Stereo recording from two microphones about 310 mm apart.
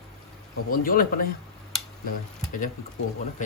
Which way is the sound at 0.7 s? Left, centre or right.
Left.